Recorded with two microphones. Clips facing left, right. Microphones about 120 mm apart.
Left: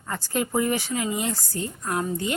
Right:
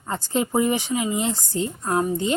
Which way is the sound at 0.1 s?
20° right (ahead or behind).